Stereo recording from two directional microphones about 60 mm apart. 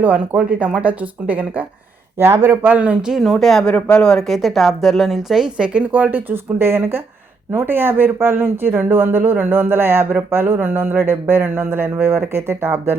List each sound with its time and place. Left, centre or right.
0.0 s speech: right
2.1 s speech: right
2.6 s speech: right
3.1 s speech: centre
3.3 s speech: centre
5.6 s speech: right